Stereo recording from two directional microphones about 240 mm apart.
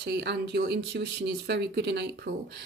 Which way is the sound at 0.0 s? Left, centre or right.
Right.